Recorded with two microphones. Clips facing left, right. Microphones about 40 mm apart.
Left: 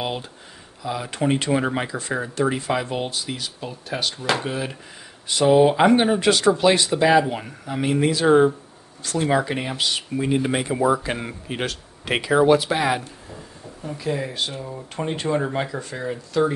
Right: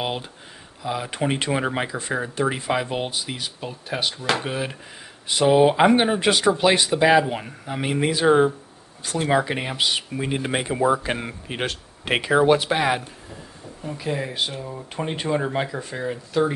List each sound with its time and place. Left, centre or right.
0.8 s speech: centre
4.2 s speech: centre
4.5 s speech: centre
11.5 s speech: right
13.9 s speech: centre